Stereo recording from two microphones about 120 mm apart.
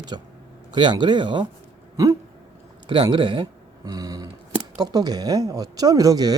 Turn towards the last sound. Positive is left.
turn(degrees=-30)  # may be behind; listen again after turning